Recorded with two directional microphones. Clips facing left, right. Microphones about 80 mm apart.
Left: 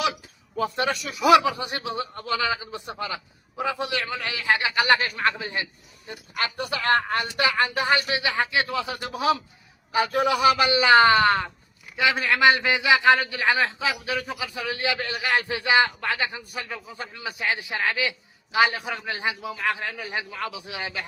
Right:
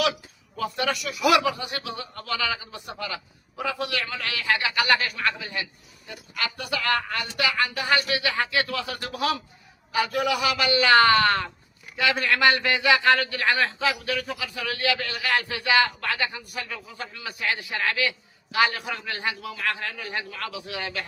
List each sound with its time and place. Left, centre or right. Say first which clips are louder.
0.0 s a man's voice: right 1 dB; left